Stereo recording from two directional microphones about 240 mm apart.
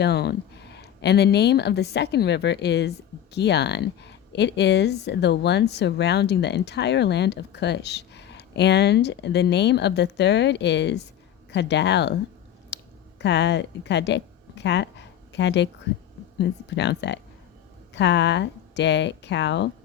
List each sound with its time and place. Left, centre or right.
0.0 s speech: left
12.7 s a sound: left
16.4 s speech: left